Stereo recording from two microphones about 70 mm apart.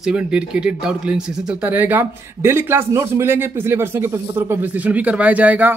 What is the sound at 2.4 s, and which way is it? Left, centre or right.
A man's voice, right.